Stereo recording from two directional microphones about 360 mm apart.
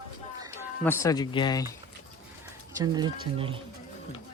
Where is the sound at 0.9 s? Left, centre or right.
Centre.